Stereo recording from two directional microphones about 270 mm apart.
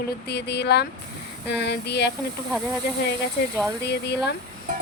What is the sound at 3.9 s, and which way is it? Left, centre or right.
Speech, left.